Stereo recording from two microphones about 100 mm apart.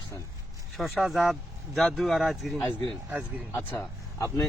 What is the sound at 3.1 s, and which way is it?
Speech, 15° right (ahead or behind).